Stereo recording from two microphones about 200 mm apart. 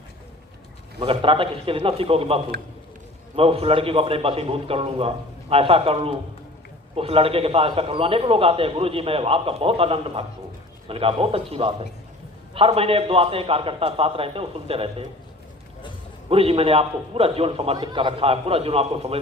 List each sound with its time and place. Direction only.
0.9 s a man's voice: 25° right (ahead or behind)
16.3 s a man's voice: 30° right (ahead or behind)